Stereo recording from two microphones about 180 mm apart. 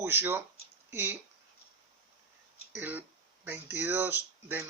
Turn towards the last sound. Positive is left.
turn(degrees=-10)  # may be behind; listen again after turning